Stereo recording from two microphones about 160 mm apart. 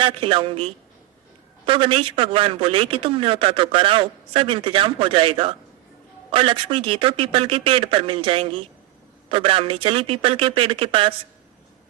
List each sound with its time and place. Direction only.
0.0 s speech: 35° right (ahead or behind)